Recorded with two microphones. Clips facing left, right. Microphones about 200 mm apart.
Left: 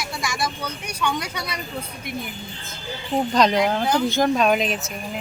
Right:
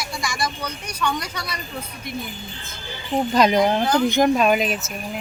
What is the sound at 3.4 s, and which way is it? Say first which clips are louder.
Speech: right 2 dB; 10° right (ahead or behind).